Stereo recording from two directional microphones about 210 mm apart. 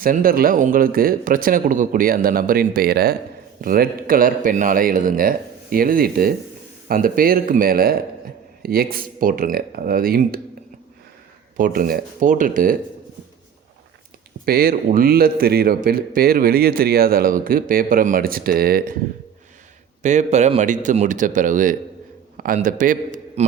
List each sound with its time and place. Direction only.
0.0 s speech: 45° right (ahead or behind)
11.5 s speech: 40° right (ahead or behind)
14.4 s speech: 45° right (ahead or behind)
20.0 s a man's voice: 35° right (ahead or behind)